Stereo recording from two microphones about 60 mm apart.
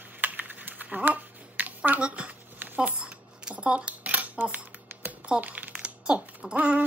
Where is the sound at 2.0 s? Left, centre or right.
Centre.